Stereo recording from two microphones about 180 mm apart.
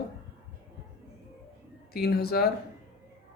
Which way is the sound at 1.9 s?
60° left (ahead or behind).